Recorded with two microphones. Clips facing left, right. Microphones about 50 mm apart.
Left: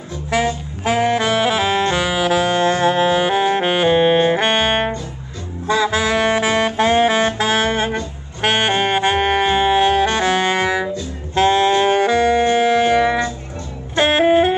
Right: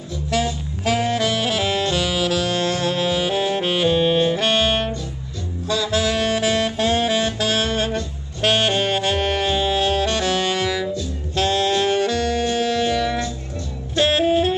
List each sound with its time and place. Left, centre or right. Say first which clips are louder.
0.3 s saxophone: left 4 dB; left
13.9 s music: left 4 dB; left